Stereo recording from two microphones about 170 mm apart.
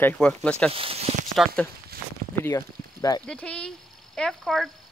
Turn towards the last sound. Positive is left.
turn(degrees=0)  # may be behind; listen again after turning